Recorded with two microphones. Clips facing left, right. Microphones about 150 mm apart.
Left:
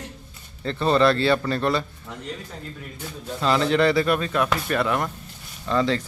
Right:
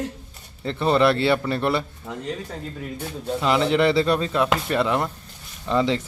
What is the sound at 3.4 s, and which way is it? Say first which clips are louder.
A man's voice: even; 15° right (ahead or behind).